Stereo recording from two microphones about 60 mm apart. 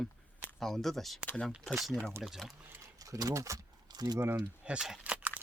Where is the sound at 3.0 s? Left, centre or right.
Right.